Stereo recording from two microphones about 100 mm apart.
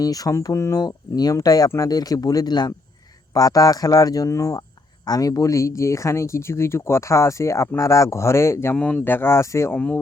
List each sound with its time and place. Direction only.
0.0 s speech: 35° left (ahead or behind)
8.7 s speech: 10° left (ahead or behind); by 9.7 s 30° left (ahead or behind)
9.7 s speech: 15° left (ahead or behind)